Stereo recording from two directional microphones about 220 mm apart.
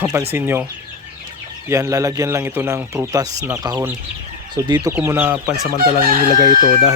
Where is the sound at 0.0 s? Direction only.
10° right (ahead or behind).